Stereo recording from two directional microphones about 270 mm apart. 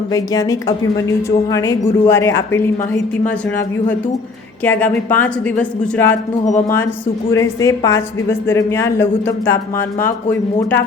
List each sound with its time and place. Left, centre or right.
1.5 s a woman's voice: centre
4.6 s a woman's voice: centre
6.4 s speech: left
7.3 s a woman's voice: centre
10.6 s a woman's voice: centre